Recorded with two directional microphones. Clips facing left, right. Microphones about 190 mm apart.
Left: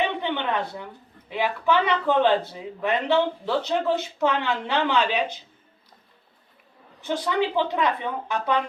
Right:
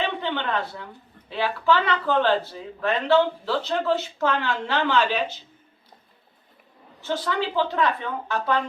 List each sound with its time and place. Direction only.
0.0 s a sound: 15° left (ahead or behind)
1.3 s speech: 15° left (ahead or behind)
7.0 s speech: 15° left (ahead or behind)